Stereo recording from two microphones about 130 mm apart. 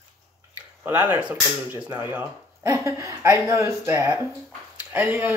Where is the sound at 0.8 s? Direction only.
10° right (ahead or behind).